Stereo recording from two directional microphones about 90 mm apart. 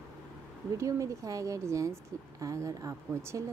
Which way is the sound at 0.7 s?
35° right (ahead or behind).